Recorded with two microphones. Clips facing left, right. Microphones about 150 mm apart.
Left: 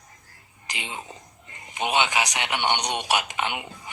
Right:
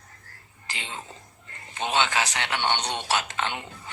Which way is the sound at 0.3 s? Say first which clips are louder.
Left 1 dB; 15° left (ahead or behind).